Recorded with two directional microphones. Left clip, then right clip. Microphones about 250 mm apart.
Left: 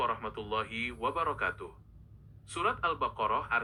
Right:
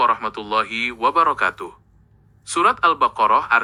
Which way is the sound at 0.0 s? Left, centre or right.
Right.